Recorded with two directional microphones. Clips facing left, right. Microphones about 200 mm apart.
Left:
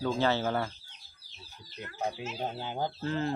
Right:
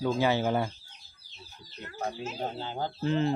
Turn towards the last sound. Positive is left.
turn(degrees=-20)  # may be behind; listen again after turning